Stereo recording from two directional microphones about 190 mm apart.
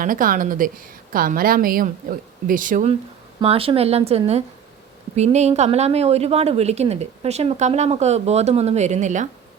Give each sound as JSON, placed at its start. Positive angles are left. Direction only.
{"t": 0.0, "sound": "a woman's voice", "side_deg": -45}
{"t": 3.4, "sound": "speech", "side_deg": -30}